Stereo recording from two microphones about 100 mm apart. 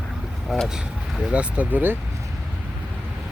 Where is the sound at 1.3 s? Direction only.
15° right (ahead or behind).